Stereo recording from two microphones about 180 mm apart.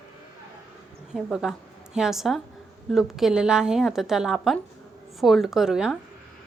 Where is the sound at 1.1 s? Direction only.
5° right (ahead or behind).